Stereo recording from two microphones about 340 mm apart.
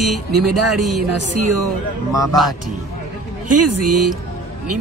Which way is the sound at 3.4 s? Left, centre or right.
Right.